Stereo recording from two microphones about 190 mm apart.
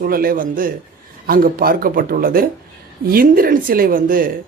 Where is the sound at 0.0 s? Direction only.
50° right (ahead or behind).